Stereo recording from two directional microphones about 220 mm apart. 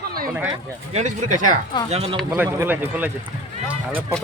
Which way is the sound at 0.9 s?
35° right (ahead or behind).